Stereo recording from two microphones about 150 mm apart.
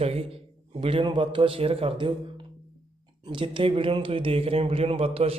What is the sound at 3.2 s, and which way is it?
Speech, 35° right (ahead or behind).